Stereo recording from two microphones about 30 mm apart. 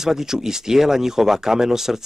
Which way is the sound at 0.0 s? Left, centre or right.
Centre.